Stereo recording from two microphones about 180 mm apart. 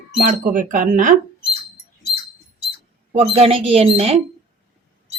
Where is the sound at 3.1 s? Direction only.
35° right (ahead or behind).